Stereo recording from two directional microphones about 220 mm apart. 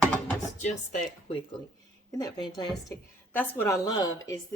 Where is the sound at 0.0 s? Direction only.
5° left (ahead or behind).